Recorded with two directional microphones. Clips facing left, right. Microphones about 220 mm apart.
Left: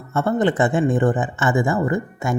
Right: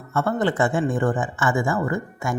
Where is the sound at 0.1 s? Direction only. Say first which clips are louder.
Left 3 dB; 20° left (ahead or behind).